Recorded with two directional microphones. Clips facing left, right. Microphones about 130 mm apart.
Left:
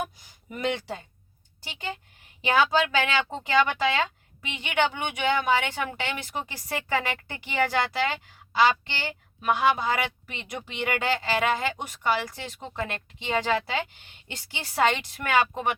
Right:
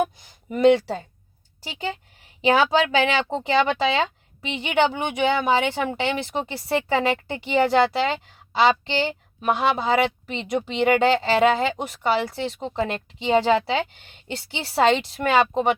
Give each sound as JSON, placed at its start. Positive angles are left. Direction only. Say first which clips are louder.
{"t": 0.5, "sound": "speech", "louder": "right 12 dB", "side_deg": -30}